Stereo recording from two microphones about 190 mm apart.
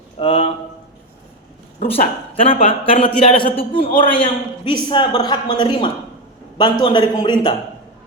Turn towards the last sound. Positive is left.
turn(degrees=25)  # may be behind; listen again after turning